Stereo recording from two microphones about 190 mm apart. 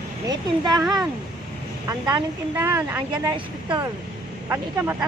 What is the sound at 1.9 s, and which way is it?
Speech, 20° right (ahead or behind).